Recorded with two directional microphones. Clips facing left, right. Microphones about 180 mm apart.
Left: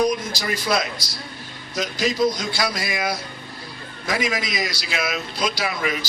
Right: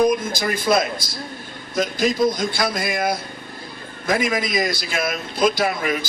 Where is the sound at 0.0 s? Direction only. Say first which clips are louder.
Right 3 dB; 50° right (ahead or behind).